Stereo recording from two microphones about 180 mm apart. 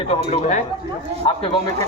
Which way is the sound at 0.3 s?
40° left (ahead or behind).